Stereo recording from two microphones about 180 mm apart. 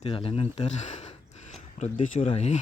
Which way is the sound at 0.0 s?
30° left (ahead or behind).